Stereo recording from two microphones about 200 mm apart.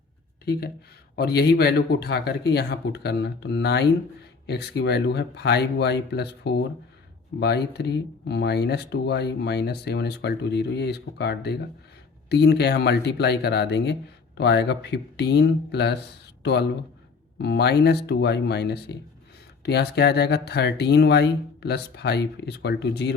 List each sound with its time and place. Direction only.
1.1 s speech: 55° left (ahead or behind)